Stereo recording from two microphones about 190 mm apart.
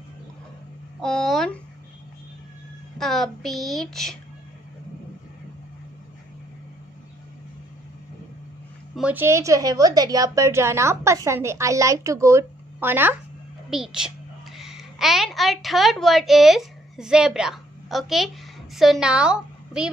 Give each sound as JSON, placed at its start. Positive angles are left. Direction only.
{"t": 1.0, "sound": "speech", "side_deg": 5}
{"t": 3.0, "sound": "speech", "side_deg": 0}
{"t": 8.9, "sound": "a woman's voice", "side_deg": -10}